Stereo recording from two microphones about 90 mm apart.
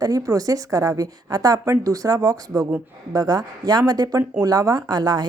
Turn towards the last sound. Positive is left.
turn(degrees=-50)  # may be behind; listen again after turning